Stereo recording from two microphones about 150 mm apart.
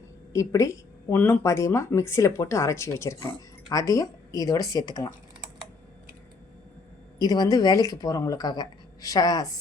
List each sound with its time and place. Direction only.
0.3 s speech: 20° left (ahead or behind)
7.2 s speech: 25° left (ahead or behind)